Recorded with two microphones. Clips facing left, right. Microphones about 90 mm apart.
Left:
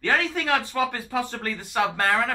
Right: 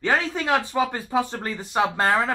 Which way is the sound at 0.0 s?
20° right (ahead or behind).